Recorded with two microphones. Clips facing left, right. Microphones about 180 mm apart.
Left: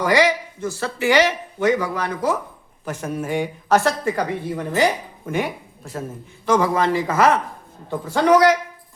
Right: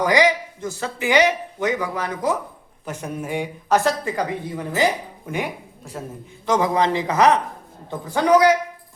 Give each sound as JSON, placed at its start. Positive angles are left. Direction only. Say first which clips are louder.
{"t": 0.0, "sound": "a woman's voice", "louder": "even", "side_deg": -15}